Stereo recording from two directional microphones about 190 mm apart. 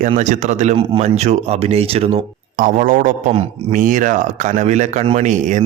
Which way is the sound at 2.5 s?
45° right (ahead or behind).